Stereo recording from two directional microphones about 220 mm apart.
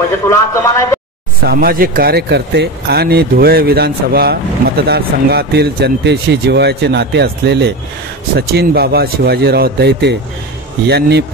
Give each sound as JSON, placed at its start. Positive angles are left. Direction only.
{"t": 0.3, "sound": "speech", "side_deg": 10}
{"t": 1.4, "sound": "speech", "side_deg": -45}